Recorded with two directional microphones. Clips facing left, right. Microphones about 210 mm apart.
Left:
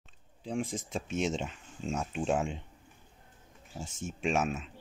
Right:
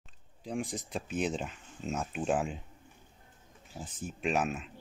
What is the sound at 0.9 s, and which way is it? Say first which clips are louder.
Speech: left 1 dB; centre (ahead or behind).